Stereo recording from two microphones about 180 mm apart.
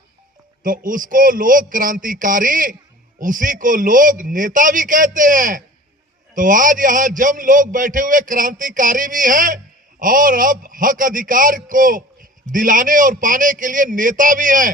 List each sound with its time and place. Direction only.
0.6 s a man's voice: 50° right (ahead or behind)